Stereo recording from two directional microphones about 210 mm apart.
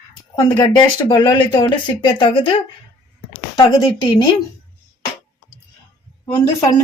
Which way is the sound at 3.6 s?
20° left (ahead or behind).